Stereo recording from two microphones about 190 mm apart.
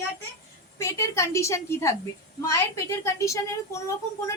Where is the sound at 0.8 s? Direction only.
15° left (ahead or behind).